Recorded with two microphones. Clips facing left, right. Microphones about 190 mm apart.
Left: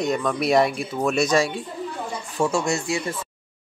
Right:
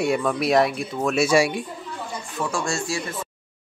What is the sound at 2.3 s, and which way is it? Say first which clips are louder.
Speech: left 4 dB; 25° left (ahead or behind).